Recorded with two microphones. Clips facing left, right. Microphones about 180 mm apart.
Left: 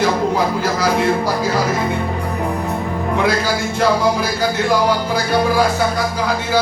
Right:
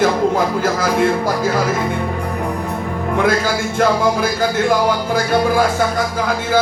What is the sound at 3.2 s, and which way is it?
Speech, 50° right (ahead or behind).